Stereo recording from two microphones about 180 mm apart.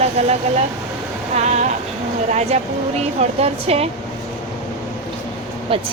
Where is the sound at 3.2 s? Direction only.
35° right (ahead or behind).